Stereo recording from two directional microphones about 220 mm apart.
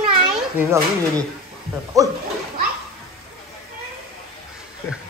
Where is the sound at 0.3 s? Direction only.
10° right (ahead or behind).